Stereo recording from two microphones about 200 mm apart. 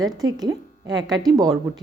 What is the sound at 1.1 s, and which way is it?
Speech, 20° right (ahead or behind).